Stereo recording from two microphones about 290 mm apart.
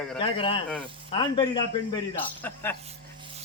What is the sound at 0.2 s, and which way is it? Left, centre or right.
Speech, centre.